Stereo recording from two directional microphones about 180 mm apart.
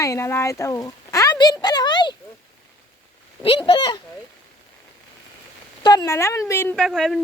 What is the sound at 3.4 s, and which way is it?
Speech, 30° left (ahead or behind).